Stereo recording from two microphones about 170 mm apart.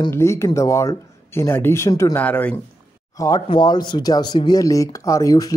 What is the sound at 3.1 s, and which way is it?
Speech, 20° left (ahead or behind).